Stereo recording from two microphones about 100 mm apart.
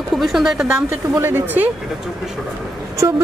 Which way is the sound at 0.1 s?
Centre (ahead or behind).